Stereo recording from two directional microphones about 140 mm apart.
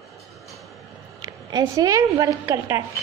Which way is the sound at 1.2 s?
30° right (ahead or behind).